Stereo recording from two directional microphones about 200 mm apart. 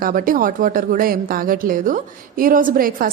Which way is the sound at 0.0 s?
45° right (ahead or behind).